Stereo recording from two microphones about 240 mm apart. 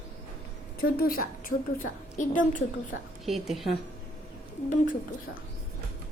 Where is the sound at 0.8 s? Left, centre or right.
Left.